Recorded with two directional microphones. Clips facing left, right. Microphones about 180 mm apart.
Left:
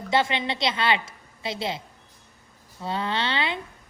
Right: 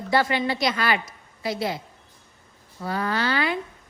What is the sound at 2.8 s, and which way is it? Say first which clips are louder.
Speech: right 2 dB; 25° left (ahead or behind).